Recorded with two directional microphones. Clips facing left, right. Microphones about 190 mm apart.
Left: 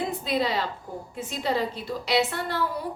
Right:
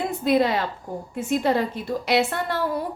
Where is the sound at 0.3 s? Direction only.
55° right (ahead or behind).